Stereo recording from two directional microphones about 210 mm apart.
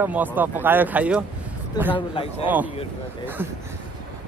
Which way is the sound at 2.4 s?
10° right (ahead or behind).